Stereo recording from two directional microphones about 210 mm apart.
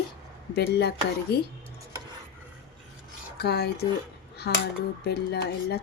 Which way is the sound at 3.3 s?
50° left (ahead or behind).